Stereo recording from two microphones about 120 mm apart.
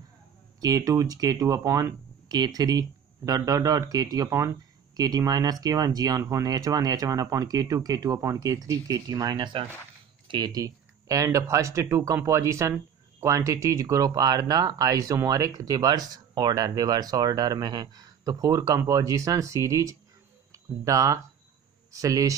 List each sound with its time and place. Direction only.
0.6 s speech: 30° right (ahead or behind)
2.2 s speech: 35° right (ahead or behind)